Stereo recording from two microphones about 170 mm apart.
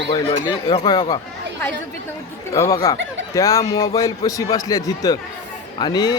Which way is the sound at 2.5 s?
20° left (ahead or behind).